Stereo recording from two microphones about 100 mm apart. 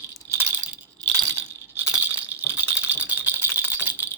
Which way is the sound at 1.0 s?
35° right (ahead or behind).